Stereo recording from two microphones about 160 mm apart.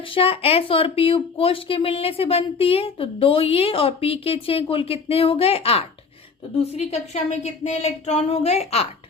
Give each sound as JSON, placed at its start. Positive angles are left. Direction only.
{"t": 0.1, "sound": "speech", "side_deg": 35}